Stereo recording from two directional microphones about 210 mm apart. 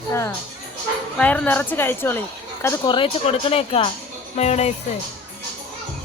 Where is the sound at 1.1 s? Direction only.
5° left (ahead or behind).